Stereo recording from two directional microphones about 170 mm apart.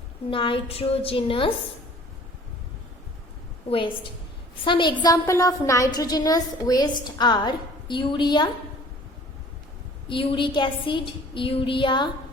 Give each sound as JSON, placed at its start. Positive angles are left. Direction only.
{"t": 0.3, "sound": "a woman's voice", "side_deg": 30}
{"t": 3.7, "sound": "a woman's voice", "side_deg": 30}
{"t": 10.1, "sound": "a woman's voice", "side_deg": 30}